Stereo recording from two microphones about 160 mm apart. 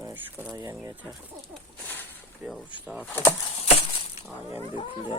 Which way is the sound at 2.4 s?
10° right (ahead or behind).